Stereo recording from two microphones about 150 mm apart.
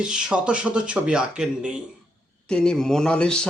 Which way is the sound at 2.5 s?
5° left (ahead or behind).